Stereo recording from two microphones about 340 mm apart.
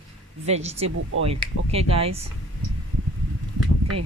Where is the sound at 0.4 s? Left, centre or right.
Centre.